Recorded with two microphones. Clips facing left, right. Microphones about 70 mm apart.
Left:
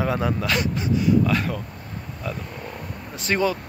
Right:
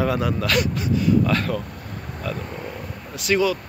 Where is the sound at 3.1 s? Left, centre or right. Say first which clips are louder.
Right 2 dB; left.